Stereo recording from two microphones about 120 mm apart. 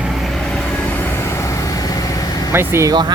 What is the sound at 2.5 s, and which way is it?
Speech, 20° right (ahead or behind).